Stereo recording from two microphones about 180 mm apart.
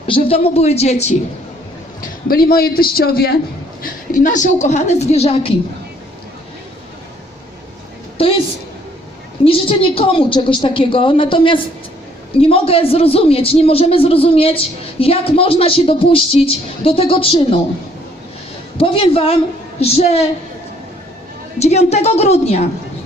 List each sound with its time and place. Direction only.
0.1 s speech: 30° left (ahead or behind)
2.0 s a man's voice: 55° left (ahead or behind)
4.1 s speech: 45° left (ahead or behind)
8.2 s a sound: 30° left (ahead or behind)
9.4 s a woman's voice: 30° left (ahead or behind)
18.8 s speech: 30° left (ahead or behind)
21.6 s speech: 35° left (ahead or behind)